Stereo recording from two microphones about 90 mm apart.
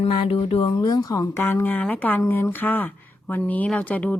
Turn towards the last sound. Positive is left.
turn(degrees=15)  # may be behind; listen again after turning